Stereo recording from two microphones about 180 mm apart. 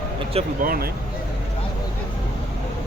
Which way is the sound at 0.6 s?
55° right (ahead or behind).